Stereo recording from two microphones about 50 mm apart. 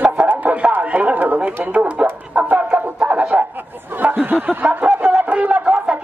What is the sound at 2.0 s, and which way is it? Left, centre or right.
Music, right.